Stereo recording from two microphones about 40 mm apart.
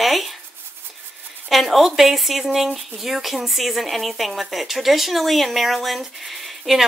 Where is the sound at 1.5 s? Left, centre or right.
Centre.